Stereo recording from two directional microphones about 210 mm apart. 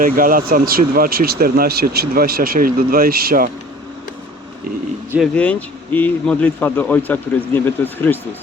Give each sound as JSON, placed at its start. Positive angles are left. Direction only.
{"t": 0.0, "sound": "speech", "side_deg": -40}
{"t": 5.3, "sound": "a man's voice", "side_deg": 5}